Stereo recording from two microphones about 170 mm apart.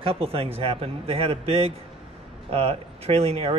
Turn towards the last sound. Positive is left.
turn(degrees=-35)  # may be behind; listen again after turning